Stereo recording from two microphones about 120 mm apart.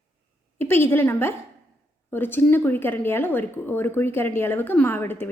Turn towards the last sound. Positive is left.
turn(degrees=15)  # may be behind; listen again after turning